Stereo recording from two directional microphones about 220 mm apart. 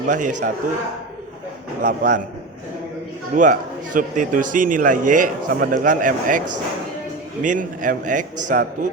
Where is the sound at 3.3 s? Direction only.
35° right (ahead or behind).